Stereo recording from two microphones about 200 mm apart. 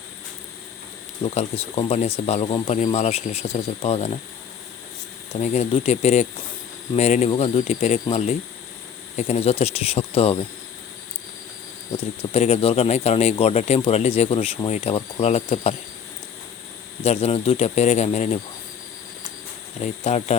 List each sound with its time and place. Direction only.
1.2 s speech: 30° left (ahead or behind)
5.4 s speech: 30° left (ahead or behind)
11.9 s speech: 30° left (ahead or behind)
17.0 s speech: 30° left (ahead or behind)
19.8 s speech: 35° left (ahead or behind)